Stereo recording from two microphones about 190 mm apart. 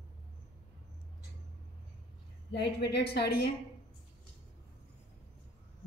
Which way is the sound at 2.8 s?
60° left (ahead or behind).